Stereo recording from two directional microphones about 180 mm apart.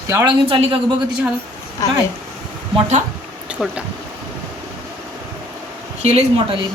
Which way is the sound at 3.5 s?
5° right (ahead or behind).